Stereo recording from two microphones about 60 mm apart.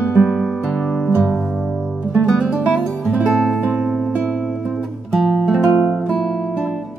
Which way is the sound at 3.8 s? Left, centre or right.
Centre.